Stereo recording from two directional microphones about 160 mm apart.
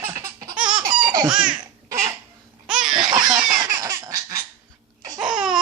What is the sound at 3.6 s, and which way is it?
Baby laughter, 20° right (ahead or behind).